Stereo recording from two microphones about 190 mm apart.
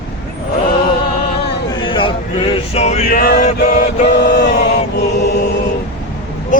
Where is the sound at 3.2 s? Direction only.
50° left (ahead or behind).